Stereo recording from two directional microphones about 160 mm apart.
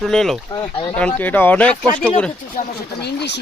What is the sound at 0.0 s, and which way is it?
Speech, centre (ahead or behind).